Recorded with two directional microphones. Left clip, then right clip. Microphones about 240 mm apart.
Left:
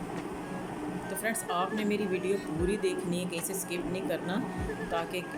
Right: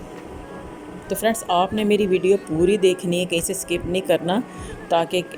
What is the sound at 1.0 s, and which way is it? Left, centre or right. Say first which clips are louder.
A woman's voice: right 13 dB; right.